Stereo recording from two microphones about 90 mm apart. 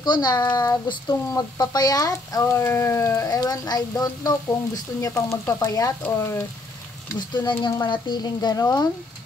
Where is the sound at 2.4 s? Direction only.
25° left (ahead or behind).